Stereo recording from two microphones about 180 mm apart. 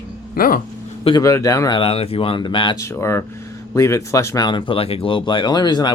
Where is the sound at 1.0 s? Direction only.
20° left (ahead or behind).